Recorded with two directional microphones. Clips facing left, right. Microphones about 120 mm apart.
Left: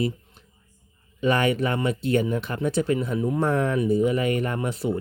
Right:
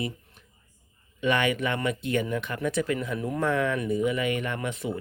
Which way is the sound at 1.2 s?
35° left (ahead or behind).